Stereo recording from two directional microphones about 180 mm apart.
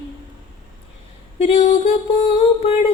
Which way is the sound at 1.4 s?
30° left (ahead or behind).